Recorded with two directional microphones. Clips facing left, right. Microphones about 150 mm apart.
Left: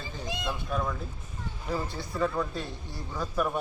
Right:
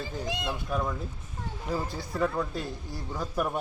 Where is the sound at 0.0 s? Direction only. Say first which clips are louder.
Right 3 dB; 90° right.